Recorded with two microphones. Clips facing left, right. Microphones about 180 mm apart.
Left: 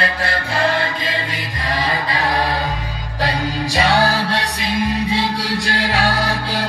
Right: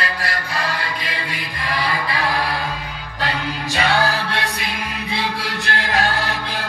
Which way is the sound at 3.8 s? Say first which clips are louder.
Left 3 dB; 35° left (ahead or behind).